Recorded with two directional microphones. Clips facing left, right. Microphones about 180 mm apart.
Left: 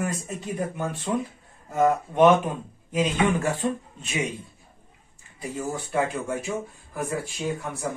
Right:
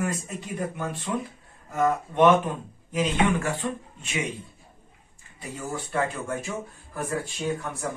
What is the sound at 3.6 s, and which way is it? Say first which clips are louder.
Speech: left 4 dB; 25° left (ahead or behind).